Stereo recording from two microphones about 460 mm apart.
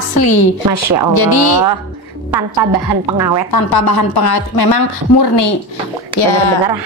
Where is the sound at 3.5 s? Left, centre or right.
Left.